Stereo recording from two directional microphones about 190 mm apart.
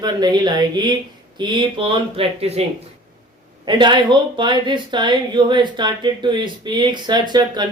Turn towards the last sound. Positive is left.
turn(degrees=-20)  # may be behind; listen again after turning